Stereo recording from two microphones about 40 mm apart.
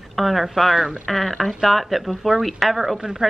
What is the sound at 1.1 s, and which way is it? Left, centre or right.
A woman's voice, centre.